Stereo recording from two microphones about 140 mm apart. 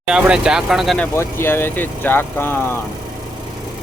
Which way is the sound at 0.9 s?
15° left (ahead or behind).